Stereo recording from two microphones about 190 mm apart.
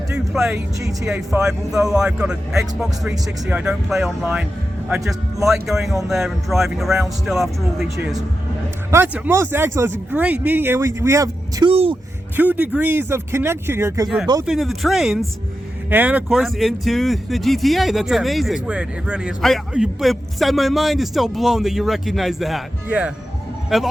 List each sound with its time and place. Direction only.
0.3 s speech: 5° right (ahead or behind)
5.5 s speech: centre (ahead or behind)
8.9 s speech: 10° right (ahead or behind)
11.7 s speech: 30° right (ahead or behind)
12.4 s speech: 10° right (ahead or behind)
14.4 s speech: centre (ahead or behind)